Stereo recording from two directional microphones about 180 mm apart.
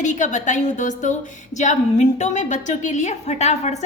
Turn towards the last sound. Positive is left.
turn(degrees=40)  # may be behind; listen again after turning